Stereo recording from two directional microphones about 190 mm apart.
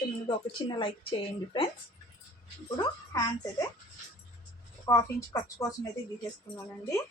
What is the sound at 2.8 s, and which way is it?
Speech, 20° left (ahead or behind).